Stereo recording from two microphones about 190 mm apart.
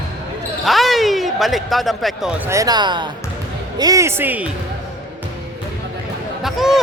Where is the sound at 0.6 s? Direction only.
Centre (ahead or behind).